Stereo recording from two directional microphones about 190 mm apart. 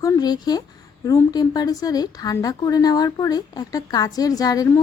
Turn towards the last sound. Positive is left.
turn(degrees=20)  # may be behind; listen again after turning